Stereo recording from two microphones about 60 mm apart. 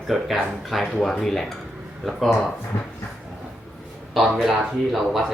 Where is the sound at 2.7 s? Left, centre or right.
Left.